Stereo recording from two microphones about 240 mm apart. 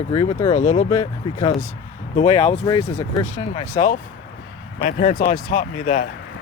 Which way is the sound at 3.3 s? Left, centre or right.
Left.